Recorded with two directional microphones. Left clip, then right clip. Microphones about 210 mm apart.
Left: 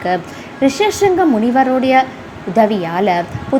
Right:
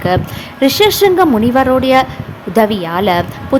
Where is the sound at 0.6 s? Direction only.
15° right (ahead or behind).